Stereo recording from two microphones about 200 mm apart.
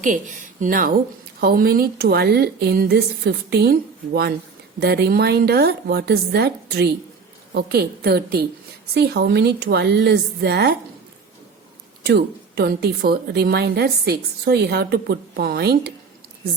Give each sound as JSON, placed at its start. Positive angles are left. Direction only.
{"t": 0.0, "sound": "a woman's voice", "side_deg": -40}
{"t": 12.0, "sound": "a woman's voice", "side_deg": -55}